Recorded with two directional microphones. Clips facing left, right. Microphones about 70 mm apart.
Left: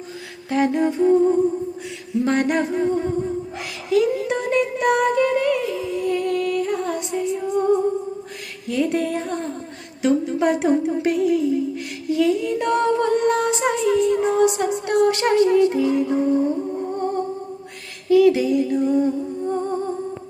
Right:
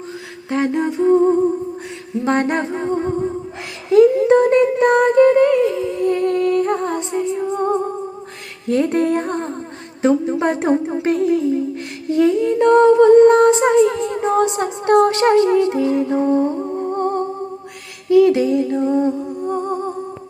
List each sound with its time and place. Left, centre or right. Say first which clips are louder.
0.5 s humming: right 1 dB; right
3.8 s music: right 8 dB; right
8.6 s music: right 5 dB; right
10.0 s a woman's voice: right 3 dB; right
10.4 s music: right 1 dB; right
12.0 s humming: right 4 dB; right
16.9 s humming: right 5 dB; right
18.1 s humming: right 2 dB; right